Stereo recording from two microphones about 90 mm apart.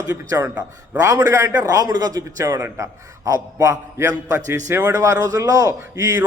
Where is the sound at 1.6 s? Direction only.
45° right (ahead or behind).